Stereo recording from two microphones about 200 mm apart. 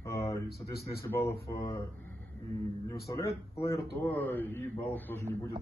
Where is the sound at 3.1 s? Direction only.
15° left (ahead or behind).